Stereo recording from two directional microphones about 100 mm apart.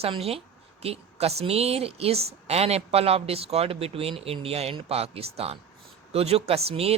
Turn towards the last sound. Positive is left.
turn(degrees=-85)